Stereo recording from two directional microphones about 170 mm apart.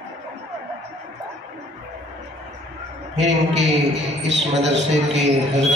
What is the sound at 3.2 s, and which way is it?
A man's voice, 40° right (ahead or behind).